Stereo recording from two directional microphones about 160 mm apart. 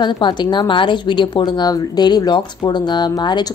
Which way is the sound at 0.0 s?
25° left (ahead or behind).